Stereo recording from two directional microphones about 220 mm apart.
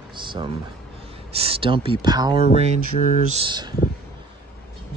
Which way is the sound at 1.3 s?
25° right (ahead or behind).